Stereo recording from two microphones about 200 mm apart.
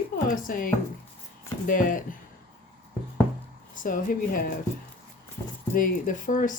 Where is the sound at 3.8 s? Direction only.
40° left (ahead or behind).